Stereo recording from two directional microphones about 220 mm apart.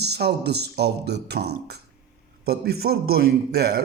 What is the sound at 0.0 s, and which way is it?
A man's voice, 50° right (ahead or behind).